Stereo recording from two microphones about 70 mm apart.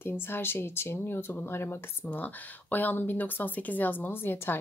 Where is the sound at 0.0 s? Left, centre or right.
Left.